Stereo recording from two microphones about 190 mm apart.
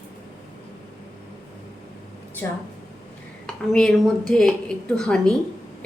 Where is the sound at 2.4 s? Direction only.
10° left (ahead or behind).